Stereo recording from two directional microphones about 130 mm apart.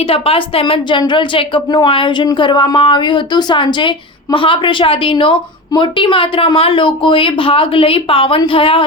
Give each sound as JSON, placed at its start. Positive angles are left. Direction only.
{"t": 0.0, "sound": "a woman's voice", "side_deg": 45}